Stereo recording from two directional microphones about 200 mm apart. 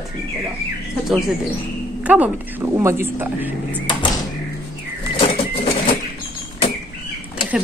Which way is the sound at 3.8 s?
25° left (ahead or behind).